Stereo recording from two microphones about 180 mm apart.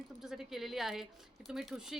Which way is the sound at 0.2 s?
Centre (ahead or behind).